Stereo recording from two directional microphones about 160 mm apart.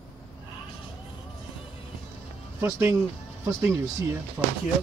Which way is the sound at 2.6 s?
15° right (ahead or behind).